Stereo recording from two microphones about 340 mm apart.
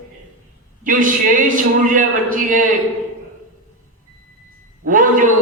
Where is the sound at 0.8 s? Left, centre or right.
Right.